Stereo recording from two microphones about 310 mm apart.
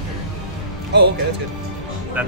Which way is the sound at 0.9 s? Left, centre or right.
Right.